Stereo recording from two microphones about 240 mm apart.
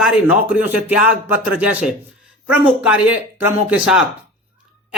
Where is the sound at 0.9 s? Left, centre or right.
Left.